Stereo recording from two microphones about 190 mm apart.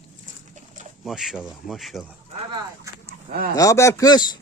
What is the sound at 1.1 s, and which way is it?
Speech, centre (ahead or behind).